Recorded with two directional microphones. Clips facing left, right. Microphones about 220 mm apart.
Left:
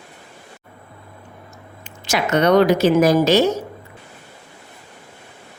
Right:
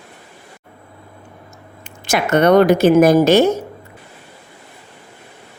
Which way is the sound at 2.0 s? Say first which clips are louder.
Right 3 dB; 50° right (ahead or behind).